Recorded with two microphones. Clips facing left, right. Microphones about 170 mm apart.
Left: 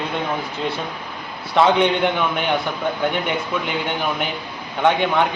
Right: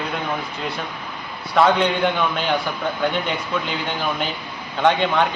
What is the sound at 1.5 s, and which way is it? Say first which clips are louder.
A man's voice: left 1 dB; 20° left (ahead or behind).